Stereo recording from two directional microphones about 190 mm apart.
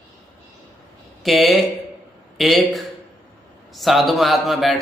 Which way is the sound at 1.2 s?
Centre (ahead or behind).